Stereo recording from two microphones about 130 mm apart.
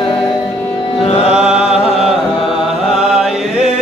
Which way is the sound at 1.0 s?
50° left (ahead or behind).